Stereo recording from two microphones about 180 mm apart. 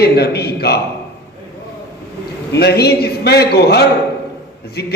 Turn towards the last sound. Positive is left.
turn(degrees=65)  # may be behind; listen again after turning